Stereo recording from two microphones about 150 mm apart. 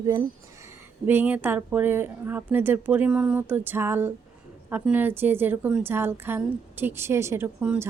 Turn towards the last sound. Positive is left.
turn(degrees=-10)  # may be behind; listen again after turning